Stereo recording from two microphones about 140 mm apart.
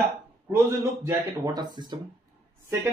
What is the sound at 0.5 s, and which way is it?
Speech, 20° right (ahead or behind).